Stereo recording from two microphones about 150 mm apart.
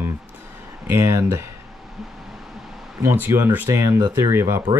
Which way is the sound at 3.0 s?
15° right (ahead or behind).